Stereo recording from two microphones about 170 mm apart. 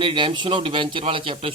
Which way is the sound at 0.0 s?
30° right (ahead or behind).